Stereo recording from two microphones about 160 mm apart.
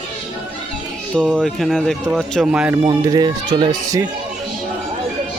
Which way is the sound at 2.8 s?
25° right (ahead or behind).